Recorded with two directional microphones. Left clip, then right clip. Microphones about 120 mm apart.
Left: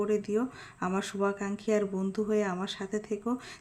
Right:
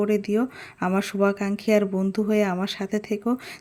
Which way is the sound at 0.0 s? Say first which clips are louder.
Right 6 dB; 55° right (ahead or behind).